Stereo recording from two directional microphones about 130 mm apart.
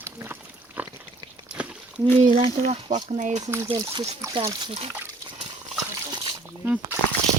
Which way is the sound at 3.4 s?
20° right (ahead or behind).